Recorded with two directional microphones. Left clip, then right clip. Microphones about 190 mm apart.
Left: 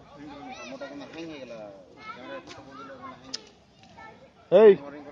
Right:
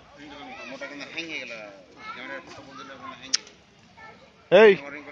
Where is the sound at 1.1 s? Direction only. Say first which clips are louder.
Right 6 dB; 35° left (ahead or behind).